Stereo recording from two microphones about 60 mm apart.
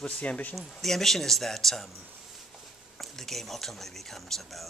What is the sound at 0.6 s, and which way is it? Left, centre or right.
Speech, centre.